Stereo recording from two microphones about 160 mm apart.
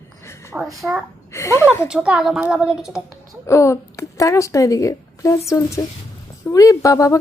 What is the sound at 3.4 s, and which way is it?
A woman's voice, 20° left (ahead or behind).